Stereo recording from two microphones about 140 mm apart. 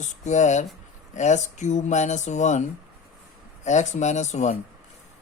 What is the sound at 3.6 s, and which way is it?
Speech, 60° left (ahead or behind).